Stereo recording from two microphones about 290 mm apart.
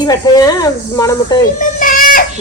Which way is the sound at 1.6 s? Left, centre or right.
Left.